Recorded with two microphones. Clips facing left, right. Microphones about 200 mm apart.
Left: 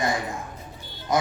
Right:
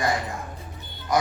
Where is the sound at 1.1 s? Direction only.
20° left (ahead or behind).